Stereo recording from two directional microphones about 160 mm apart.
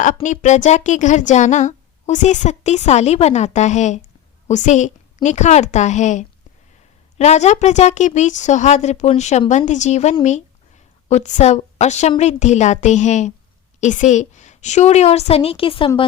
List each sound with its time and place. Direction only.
0.0 s speech: 50° left (ahead or behind); by 15.9 s 35° left (ahead or behind)